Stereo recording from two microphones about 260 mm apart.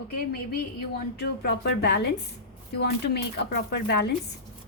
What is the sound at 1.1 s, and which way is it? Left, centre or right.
Speech, left.